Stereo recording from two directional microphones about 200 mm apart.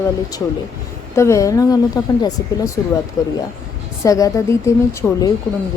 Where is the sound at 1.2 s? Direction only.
15° left (ahead or behind).